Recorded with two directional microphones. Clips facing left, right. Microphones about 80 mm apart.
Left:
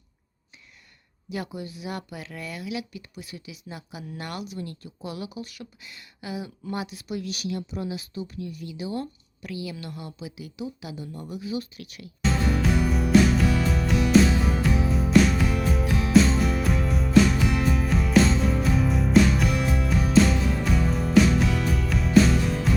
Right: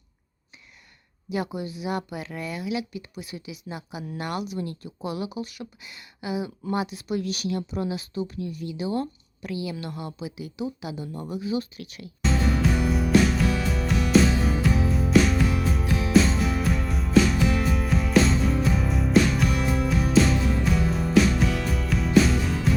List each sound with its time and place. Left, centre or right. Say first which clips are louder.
1.3 s speech: right 4 dB; centre
7.1 s speech: right 3 dB; right
12.2 s music: right 1 dB; centre